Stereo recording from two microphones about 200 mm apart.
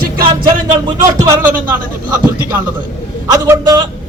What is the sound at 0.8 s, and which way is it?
Speech, 15° right (ahead or behind).